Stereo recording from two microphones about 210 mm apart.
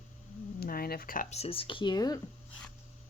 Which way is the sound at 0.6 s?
45° left (ahead or behind).